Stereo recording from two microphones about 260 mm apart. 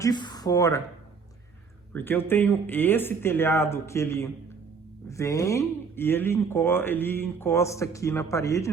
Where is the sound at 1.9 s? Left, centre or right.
Centre.